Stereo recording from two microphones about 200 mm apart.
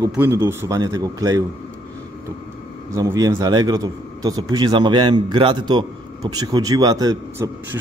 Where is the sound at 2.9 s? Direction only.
15° right (ahead or behind).